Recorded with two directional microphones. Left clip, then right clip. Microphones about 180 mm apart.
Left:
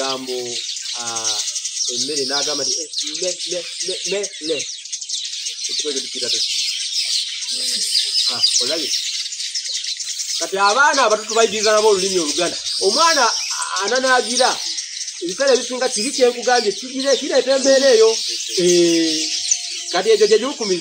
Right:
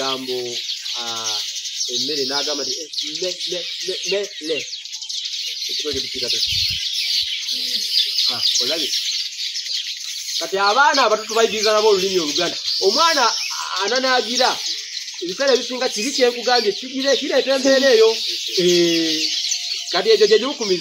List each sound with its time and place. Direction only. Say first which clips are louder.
2.1 s speech: left 1 dB; 15° right (ahead or behind)
5.8 s speech: left 1 dB; 15° right (ahead or behind)
8.3 s speech: left 1 dB; 5° right (ahead or behind)
10.5 s speech: left 1 dB; 10° right (ahead or behind)